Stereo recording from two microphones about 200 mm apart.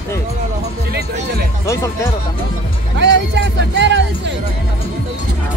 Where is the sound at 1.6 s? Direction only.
15° left (ahead or behind).